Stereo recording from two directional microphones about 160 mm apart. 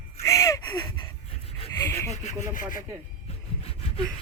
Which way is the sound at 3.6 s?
35° left (ahead or behind).